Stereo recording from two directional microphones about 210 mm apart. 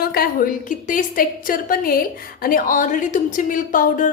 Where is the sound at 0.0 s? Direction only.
45° left (ahead or behind).